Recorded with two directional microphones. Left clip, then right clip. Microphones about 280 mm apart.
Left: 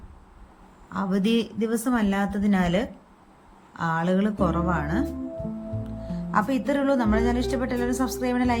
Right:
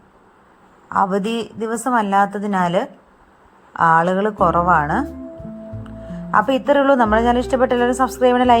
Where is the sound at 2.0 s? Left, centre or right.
Right.